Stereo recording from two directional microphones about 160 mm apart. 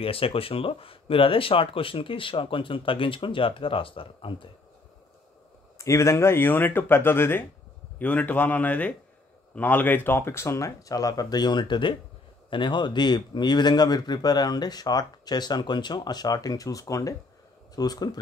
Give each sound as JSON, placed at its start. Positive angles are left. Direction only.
{"t": 0.0, "sound": "speech", "side_deg": 35}
{"t": 5.8, "sound": "a man's voice", "side_deg": 20}